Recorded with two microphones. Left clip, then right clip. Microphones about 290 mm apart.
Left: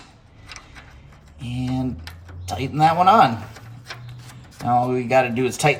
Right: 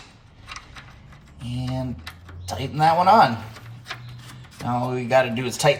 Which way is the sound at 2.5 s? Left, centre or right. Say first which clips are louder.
Left 1 dB; centre.